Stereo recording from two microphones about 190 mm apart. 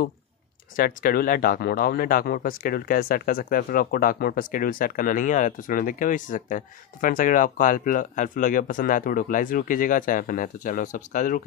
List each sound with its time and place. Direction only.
0.7 s speech: 50° left (ahead or behind)